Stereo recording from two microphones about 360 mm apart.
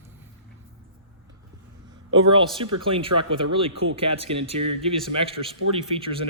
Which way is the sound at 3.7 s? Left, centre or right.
Right.